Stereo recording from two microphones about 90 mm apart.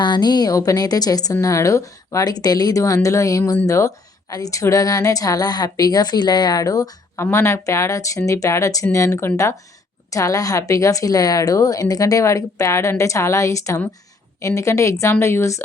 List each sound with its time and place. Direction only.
0.0 s a woman's voice: 55° left (ahead or behind)
7.2 s a woman's voice: 30° left (ahead or behind)